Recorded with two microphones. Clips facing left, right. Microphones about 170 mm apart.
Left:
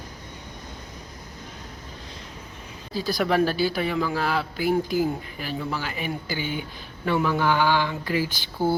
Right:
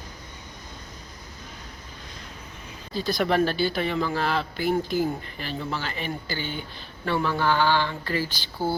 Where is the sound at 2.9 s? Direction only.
5° left (ahead or behind).